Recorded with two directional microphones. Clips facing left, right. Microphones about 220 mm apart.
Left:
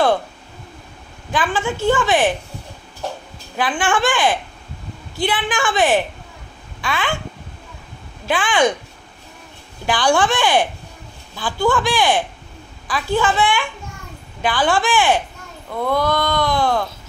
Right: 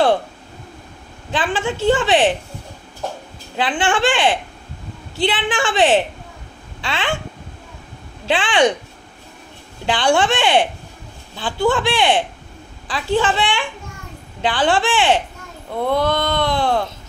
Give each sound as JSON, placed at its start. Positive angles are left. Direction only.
{"t": 1.3, "sound": "speech", "side_deg": -30}
{"t": 3.5, "sound": "speech", "side_deg": -25}
{"t": 8.3, "sound": "speech", "side_deg": -25}
{"t": 9.8, "sound": "speech", "side_deg": -25}